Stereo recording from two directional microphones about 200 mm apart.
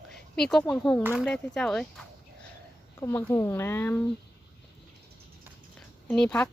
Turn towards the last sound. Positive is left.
turn(degrees=5)  # may be behind; listen again after turning